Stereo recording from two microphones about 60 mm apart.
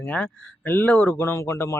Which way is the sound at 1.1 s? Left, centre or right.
Left.